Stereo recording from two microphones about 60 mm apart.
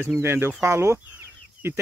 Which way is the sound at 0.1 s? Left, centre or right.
Right.